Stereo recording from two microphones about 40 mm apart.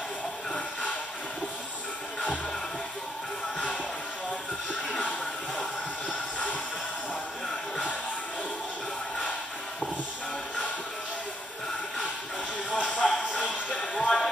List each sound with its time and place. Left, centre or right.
5.6 s music: left
12.7 s a sound: left
13.9 s music: left